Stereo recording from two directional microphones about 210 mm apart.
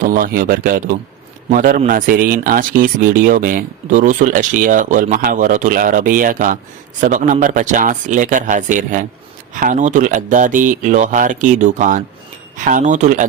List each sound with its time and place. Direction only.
0.0 s speech: 40° right (ahead or behind)